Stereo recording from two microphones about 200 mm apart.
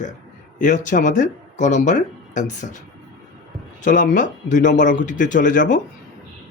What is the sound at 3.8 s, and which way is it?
Speech, 40° left (ahead or behind).